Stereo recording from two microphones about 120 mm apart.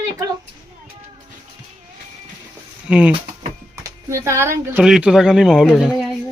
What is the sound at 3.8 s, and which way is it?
Speech, 25° right (ahead or behind).